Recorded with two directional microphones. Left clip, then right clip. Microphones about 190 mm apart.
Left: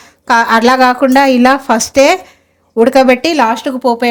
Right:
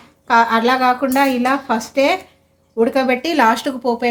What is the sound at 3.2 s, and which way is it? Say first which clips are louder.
Speech: left 3 dB; 30° left (ahead or behind).